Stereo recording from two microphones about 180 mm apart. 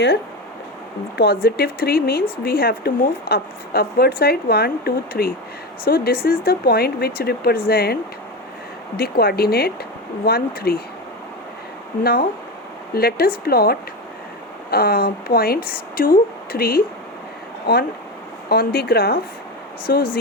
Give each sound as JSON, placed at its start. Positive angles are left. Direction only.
{"t": 1.1, "sound": "speech", "side_deg": 60}
{"t": 9.0, "sound": "speech", "side_deg": 60}
{"t": 12.9, "sound": "speech", "side_deg": 60}
{"t": 18.4, "sound": "speech", "side_deg": 60}